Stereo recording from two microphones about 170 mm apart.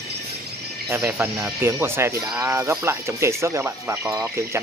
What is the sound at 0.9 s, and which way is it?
Speech, 10° right (ahead or behind).